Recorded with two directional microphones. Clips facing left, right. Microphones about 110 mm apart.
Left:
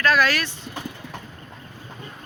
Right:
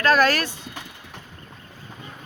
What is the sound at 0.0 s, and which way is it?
Speech, 40° right (ahead or behind).